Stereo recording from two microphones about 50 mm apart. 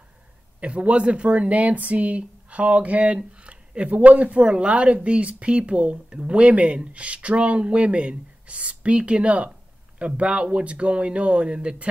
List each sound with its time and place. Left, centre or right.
0.6 s speech: right